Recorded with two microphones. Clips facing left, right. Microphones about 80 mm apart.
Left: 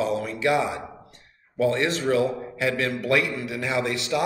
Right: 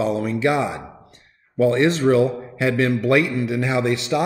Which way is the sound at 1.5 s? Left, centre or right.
Right.